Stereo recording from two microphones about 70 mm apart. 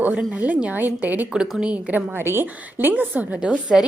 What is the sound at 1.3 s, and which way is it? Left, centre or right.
A woman's voice, centre.